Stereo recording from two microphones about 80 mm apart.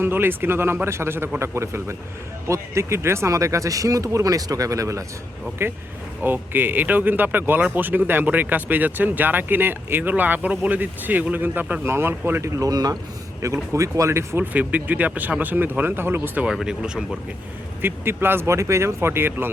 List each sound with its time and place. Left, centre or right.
0.0 s speech: right
5.6 s speech: right
13.4 s speech: right
14.5 s speech: centre
16.5 s speech: centre
17.8 s speech: right